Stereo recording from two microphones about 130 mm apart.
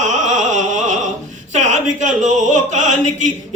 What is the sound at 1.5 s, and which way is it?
Speech, 65° right (ahead or behind).